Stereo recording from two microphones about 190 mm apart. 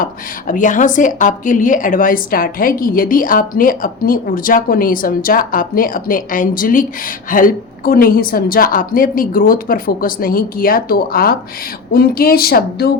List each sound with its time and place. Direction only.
0.0 s a woman's voice: 45° left (ahead or behind)